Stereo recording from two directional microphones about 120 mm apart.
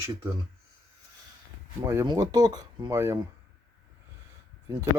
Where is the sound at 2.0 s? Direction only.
35° right (ahead or behind).